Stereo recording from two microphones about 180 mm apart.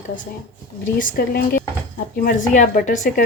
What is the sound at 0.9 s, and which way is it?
Speech, 55° left (ahead or behind).